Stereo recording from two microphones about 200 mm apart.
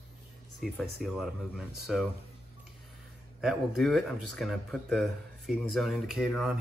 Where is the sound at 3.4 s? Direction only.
Centre (ahead or behind).